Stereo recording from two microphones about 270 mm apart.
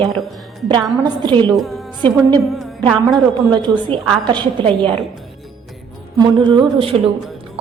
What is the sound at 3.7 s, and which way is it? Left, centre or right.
Speech, centre.